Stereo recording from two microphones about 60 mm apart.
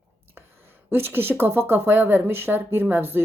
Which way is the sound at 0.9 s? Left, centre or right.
Right.